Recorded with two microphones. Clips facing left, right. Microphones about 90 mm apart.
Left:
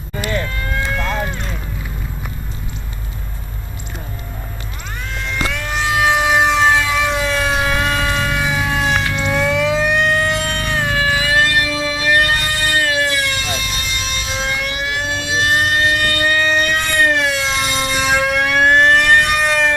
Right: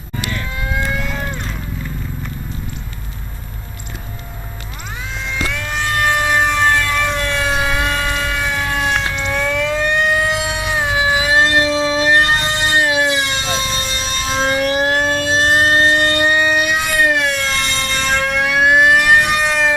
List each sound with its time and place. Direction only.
0.6 s vehicle: 10° right (ahead or behind)
5.3 s civil defense siren: centre (ahead or behind)